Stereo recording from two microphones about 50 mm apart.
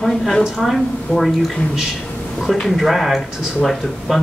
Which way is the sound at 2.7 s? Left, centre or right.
Centre.